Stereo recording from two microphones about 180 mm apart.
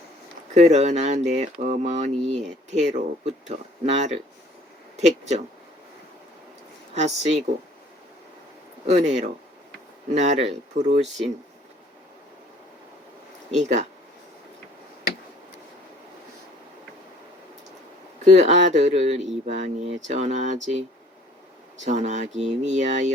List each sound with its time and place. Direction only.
0.5 s speech: 40° right (ahead or behind)
6.9 s speech: 40° right (ahead or behind)
8.9 s speech: 40° right (ahead or behind)
13.5 s speech: 40° right (ahead or behind)
18.3 s speech: 40° right (ahead or behind)
21.8 s speech: 40° right (ahead or behind)